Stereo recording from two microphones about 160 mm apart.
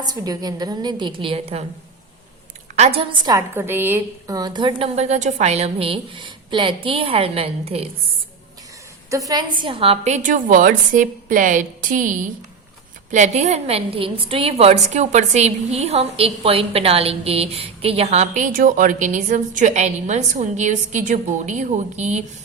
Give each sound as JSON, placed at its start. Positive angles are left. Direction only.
{"t": 0.0, "sound": "a woman's voice", "side_deg": -25}
{"t": 2.7, "sound": "a woman's voice", "side_deg": -40}
{"t": 3.3, "sound": "a woman's voice", "side_deg": -15}
{"t": 4.9, "sound": "a woman's voice", "side_deg": -45}
{"t": 9.0, "sound": "a woman's voice", "side_deg": -20}